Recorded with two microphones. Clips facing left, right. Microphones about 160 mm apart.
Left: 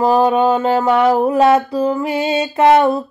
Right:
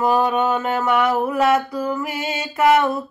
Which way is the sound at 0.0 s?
30° left (ahead or behind).